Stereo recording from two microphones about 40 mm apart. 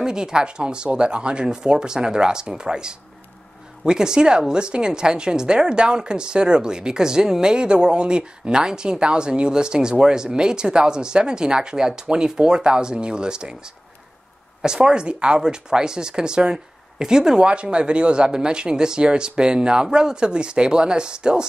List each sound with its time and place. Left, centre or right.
0.0 s a woman's voice: centre
14.6 s a woman's voice: centre